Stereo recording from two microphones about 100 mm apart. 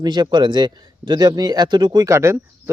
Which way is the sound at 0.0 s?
45° right (ahead or behind).